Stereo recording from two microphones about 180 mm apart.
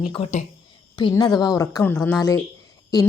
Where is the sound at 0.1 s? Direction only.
35° left (ahead or behind).